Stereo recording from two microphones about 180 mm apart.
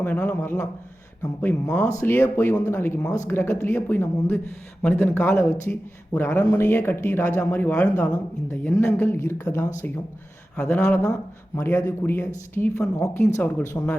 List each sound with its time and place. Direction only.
0.0 s speech: 10° left (ahead or behind)